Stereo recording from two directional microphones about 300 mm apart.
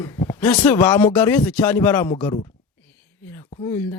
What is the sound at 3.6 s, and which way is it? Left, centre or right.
Speech, centre.